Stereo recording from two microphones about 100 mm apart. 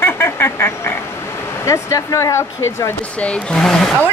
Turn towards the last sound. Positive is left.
turn(degrees=5)  # may be behind; listen again after turning